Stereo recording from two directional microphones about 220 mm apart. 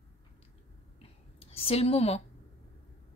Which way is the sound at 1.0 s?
25° left (ahead or behind).